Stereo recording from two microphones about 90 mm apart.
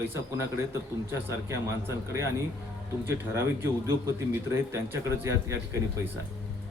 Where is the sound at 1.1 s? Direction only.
30° right (ahead or behind).